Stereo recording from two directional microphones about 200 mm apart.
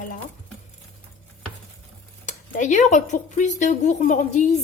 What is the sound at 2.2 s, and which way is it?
A woman's voice, 40° left (ahead or behind).